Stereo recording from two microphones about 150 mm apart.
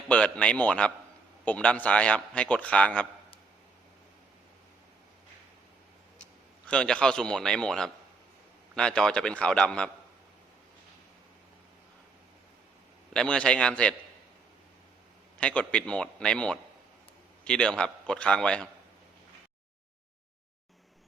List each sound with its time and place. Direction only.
0.1 s a man's voice: 10° left (ahead or behind)
6.7 s a man's voice: 5° left (ahead or behind)
13.1 s a man's voice: 5° left (ahead or behind)
15.4 s a man's voice: 10° left (ahead or behind)